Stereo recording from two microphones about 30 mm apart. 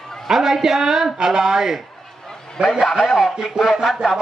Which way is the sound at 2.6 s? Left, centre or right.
Right.